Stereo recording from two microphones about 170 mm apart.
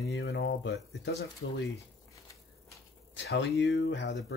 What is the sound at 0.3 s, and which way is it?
Speech, 90° left.